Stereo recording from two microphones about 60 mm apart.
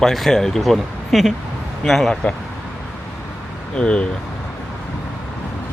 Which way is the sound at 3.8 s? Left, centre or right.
Centre.